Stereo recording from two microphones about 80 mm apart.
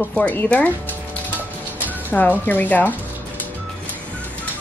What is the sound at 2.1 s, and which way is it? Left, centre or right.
Speech, left.